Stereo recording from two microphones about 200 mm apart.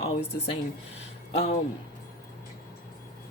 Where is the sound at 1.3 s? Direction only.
30° left (ahead or behind).